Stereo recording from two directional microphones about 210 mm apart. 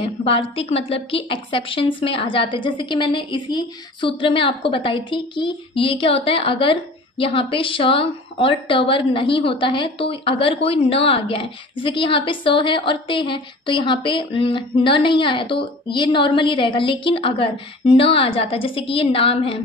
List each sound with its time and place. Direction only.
0.0 s a woman's voice: 25° left (ahead or behind)